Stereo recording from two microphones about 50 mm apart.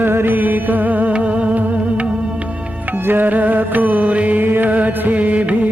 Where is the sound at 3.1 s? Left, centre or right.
Right.